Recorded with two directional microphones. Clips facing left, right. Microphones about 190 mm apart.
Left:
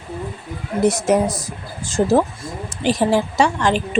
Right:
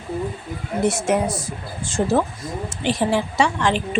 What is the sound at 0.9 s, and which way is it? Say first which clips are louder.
A woman's voice: left 4 dB; 40° left (ahead or behind).